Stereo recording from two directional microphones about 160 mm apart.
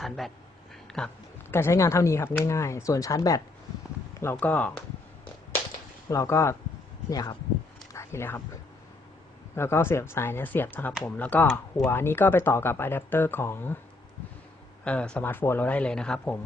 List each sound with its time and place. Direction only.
0.2 s speech: centre (ahead or behind)
6.1 s speech: 20° left (ahead or behind)
7.9 s a sound: 15° left (ahead or behind)
9.6 s speech: 15° left (ahead or behind)
14.8 s speech: 5° left (ahead or behind)